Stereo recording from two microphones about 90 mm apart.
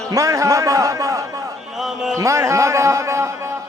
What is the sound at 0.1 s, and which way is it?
A man's voice, 35° right (ahead or behind).